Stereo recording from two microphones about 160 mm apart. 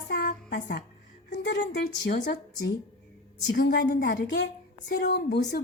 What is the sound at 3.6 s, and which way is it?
Speech, 85° left.